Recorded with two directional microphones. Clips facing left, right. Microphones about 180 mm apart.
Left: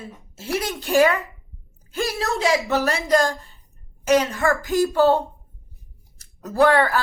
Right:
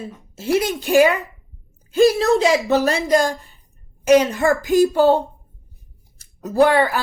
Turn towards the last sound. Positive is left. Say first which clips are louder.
# right 2 dB
turn(degrees=-15)  # may be behind; listen again after turning